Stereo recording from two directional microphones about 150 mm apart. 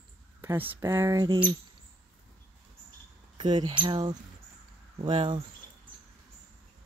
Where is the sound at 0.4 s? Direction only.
15° right (ahead or behind).